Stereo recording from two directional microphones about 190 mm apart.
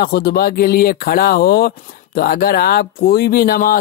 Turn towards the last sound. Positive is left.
turn(degrees=50)  # may be behind; listen again after turning